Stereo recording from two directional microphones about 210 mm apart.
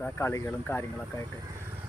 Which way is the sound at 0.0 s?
10° left (ahead or behind).